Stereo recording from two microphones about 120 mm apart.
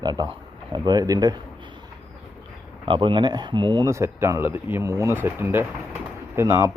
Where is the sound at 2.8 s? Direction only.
45° right (ahead or behind).